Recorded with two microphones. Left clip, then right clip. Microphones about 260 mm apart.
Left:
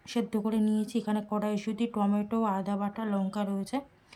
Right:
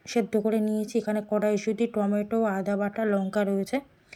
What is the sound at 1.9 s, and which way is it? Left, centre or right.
Speech, left.